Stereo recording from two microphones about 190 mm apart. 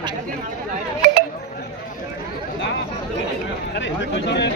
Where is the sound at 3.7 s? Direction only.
65° left (ahead or behind).